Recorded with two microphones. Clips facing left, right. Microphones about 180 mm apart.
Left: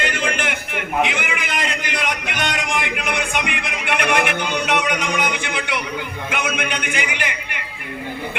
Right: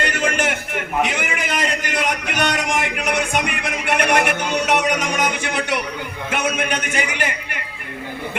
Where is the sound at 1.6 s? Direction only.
40° right (ahead or behind).